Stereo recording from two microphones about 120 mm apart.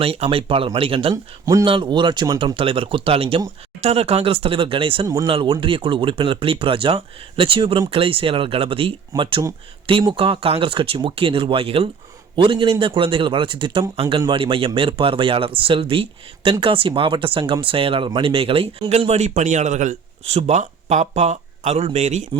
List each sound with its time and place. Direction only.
0.0 s speech: 50° right (ahead or behind)
1.1 s speech: 25° right (ahead or behind)
1.6 s speech: 45° right (ahead or behind)
2.4 s speech: 45° right (ahead or behind)
3.8 s speech: 60° right (ahead or behind); by 13.8 s 45° right (ahead or behind)
13.9 s speech: 55° right (ahead or behind); by 22.3 s 75° right (ahead or behind)